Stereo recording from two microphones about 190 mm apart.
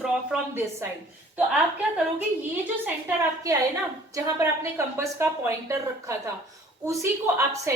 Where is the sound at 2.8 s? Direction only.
15° right (ahead or behind).